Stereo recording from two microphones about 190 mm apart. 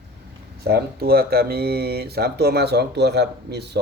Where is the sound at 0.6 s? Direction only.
55° right (ahead or behind).